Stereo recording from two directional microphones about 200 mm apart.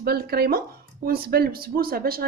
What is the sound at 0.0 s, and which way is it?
Speech, 50° right (ahead or behind).